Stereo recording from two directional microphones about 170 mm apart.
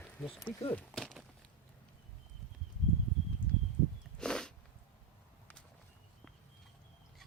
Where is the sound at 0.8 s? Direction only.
5° left (ahead or behind).